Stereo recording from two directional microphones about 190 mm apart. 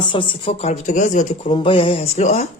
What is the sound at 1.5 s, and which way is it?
Speech, 25° left (ahead or behind).